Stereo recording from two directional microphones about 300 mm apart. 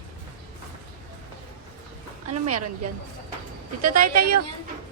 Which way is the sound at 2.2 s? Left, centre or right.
Right.